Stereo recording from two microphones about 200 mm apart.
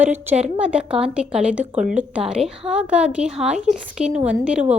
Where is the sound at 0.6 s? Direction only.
5° right (ahead or behind).